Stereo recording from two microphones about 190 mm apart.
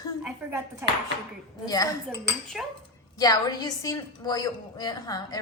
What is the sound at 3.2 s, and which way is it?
A woman's voice, 20° left (ahead or behind).